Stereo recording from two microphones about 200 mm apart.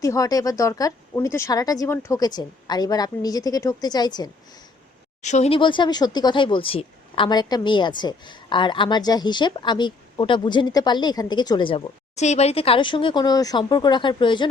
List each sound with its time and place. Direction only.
0.0 s speech: 15° left (ahead or behind)
5.2 s speech: 35° left (ahead or behind)